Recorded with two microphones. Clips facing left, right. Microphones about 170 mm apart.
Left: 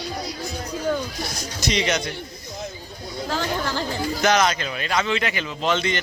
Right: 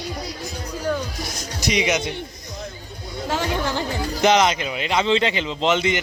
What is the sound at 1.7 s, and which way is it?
Speech, 15° right (ahead or behind).